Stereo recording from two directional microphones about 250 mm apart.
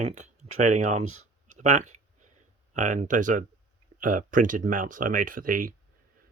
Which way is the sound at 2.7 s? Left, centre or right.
Right.